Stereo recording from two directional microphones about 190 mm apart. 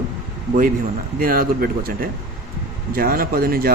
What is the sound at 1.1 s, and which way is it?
Speech, 50° right (ahead or behind).